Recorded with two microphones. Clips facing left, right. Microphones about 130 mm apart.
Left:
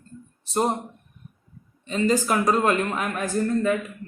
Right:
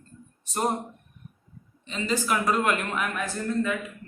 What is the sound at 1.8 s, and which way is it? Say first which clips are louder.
A man's voice: left 6 dB; 45° left (ahead or behind).